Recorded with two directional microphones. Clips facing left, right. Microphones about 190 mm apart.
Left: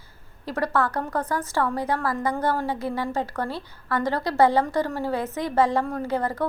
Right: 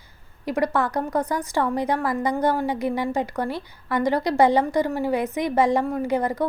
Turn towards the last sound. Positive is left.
turn(degrees=-15)  # may be behind; listen again after turning